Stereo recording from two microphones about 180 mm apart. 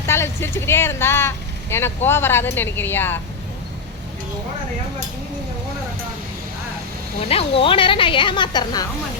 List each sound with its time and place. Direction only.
0.0 s speech: 15° left (ahead or behind)
7.2 s speech: 35° left (ahead or behind)